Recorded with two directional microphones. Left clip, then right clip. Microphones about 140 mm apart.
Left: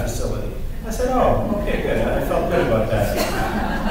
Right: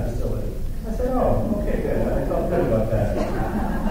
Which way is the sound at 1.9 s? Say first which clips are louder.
Left 4 dB; 30° left (ahead or behind).